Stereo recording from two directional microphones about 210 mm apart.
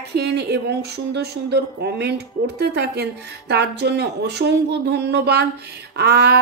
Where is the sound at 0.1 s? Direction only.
50° right (ahead or behind).